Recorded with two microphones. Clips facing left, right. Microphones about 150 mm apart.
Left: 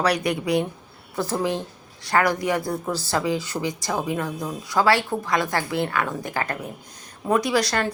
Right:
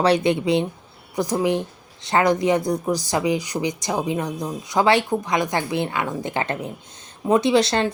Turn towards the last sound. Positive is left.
turn(degrees=-25)  # may be behind; listen again after turning